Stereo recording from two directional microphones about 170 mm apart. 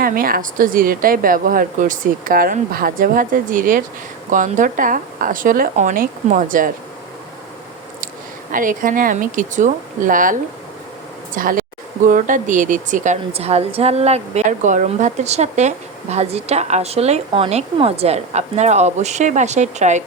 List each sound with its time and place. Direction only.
0.0 s a woman's voice: 55° right (ahead or behind)
8.5 s speech: 50° right (ahead or behind)
11.3 s a woman's voice: 55° right (ahead or behind)